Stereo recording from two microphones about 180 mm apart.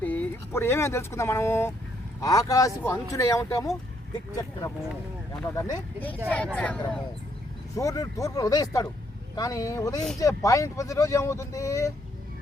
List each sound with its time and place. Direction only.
0.0 s speech: 10° left (ahead or behind)
5.5 s speech: 15° left (ahead or behind)
7.8 s speech: 20° left (ahead or behind)